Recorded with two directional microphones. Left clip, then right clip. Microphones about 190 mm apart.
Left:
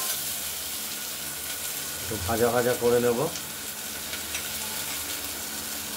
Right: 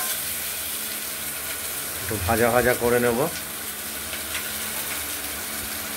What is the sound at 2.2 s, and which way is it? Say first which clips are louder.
Speech: right 4 dB; 20° right (ahead or behind).